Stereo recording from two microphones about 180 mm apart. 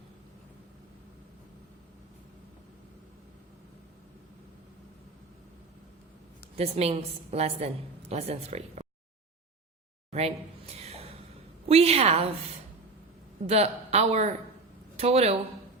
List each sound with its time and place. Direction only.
6.6 s a woman's voice: 35° right (ahead or behind)
10.1 s a sound: 35° right (ahead or behind)
11.7 s a woman's voice: 35° right (ahead or behind)
13.5 s a woman's voice: 35° right (ahead or behind)